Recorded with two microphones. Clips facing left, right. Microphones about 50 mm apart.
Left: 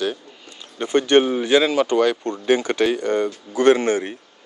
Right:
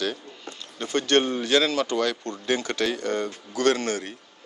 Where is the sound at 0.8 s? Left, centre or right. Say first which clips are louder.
Left 6 dB; left.